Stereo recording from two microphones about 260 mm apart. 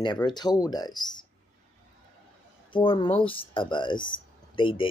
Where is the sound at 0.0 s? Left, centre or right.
Centre.